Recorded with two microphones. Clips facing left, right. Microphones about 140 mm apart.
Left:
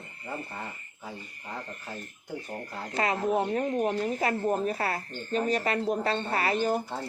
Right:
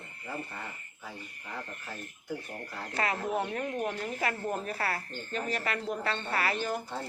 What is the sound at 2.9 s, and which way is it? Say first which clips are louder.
Speech: left 4 dB; 25° left (ahead or behind).